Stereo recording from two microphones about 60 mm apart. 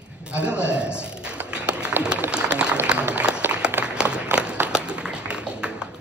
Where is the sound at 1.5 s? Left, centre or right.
Centre.